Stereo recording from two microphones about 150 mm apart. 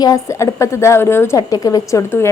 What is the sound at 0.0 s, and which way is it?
A woman's voice, 20° left (ahead or behind).